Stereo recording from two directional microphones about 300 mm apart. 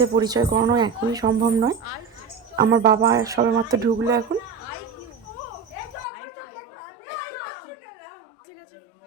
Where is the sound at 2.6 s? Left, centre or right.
Right.